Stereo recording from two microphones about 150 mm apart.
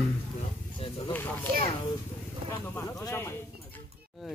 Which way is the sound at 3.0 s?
20° left (ahead or behind).